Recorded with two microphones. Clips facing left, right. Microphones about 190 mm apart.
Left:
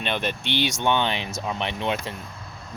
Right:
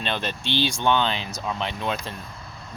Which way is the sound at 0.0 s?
15° left (ahead or behind).